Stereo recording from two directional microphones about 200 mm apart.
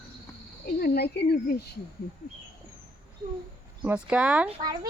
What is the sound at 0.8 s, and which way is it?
Speech, 50° left (ahead or behind).